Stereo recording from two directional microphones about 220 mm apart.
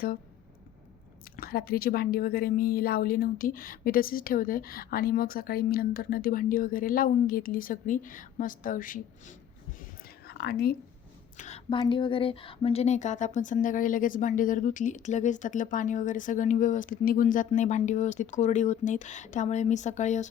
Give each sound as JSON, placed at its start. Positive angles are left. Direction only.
{"t": 1.2, "sound": "speech", "side_deg": 40}
{"t": 11.3, "sound": "speech", "side_deg": 30}